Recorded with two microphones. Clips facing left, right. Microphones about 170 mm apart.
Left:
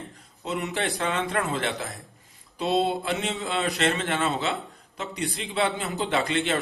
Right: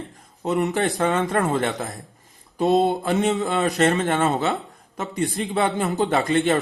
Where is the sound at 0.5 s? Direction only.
40° right (ahead or behind).